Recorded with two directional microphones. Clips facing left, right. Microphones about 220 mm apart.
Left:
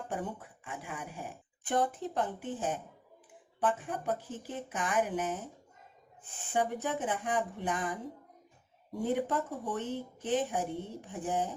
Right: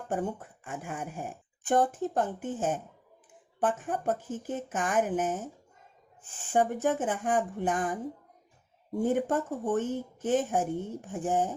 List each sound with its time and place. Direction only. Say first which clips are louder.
0.1 s speech: right 8 dB; 45° right (ahead or behind)
6.5 s speech: right 6 dB; 45° right (ahead or behind)
9.0 s speech: right 4 dB; 45° right (ahead or behind)